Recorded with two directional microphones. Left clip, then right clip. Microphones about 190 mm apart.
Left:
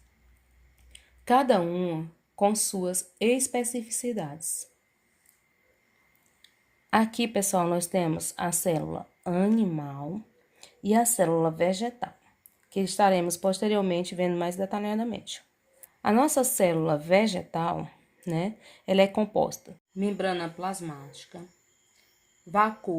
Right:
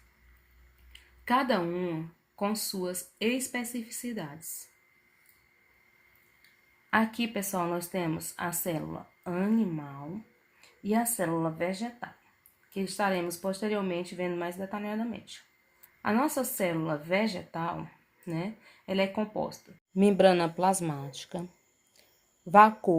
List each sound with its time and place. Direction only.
1.3 s speech: 55° left (ahead or behind)
6.9 s speech: 70° left (ahead or behind); by 19.5 s 50° left (ahead or behind)
20.0 s speech: 60° right (ahead or behind)
22.5 s speech: 55° right (ahead or behind)